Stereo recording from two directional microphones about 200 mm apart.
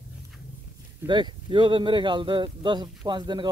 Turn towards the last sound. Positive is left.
turn(degrees=-20)  # may be behind; listen again after turning